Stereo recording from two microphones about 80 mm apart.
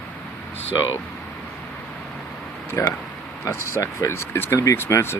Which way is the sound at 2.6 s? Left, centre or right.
Left.